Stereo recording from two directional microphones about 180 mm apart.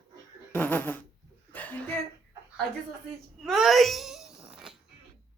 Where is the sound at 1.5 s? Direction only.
10° left (ahead or behind).